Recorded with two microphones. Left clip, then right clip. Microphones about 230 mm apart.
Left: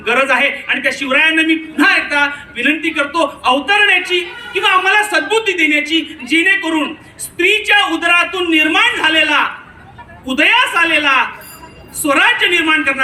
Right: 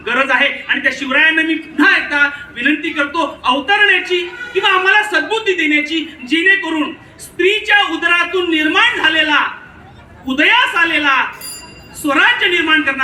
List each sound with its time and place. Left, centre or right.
0.0 s a man's voice: left